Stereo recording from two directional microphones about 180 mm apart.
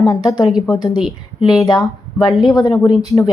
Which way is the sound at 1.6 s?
20° left (ahead or behind).